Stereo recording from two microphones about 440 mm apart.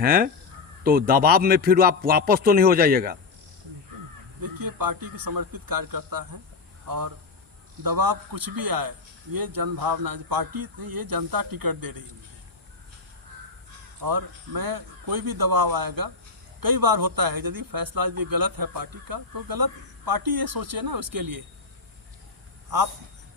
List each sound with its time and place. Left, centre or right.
0.0 s speech: centre
4.4 s speech: right
14.0 s speech: right